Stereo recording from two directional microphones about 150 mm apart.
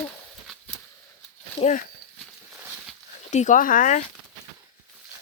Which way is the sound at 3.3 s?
55° left (ahead or behind).